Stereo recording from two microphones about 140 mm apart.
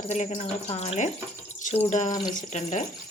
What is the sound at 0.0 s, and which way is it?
Speech, 55° left (ahead or behind).